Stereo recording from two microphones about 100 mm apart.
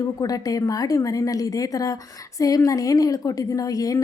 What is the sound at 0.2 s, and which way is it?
A woman's voice, 35° left (ahead or behind).